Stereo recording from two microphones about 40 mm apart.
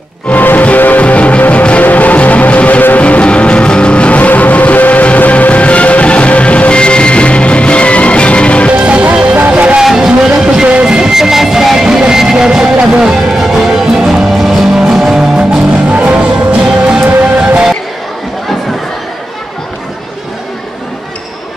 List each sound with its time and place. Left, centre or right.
0.3 s music: left
1.0 s music: left
8.8 s music: right
10.0 s music: centre
16.1 s music: right